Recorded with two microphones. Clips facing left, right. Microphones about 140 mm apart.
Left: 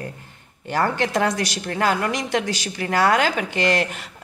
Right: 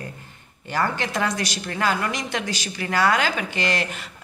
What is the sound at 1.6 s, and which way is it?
A woman's voice, 55° left (ahead or behind).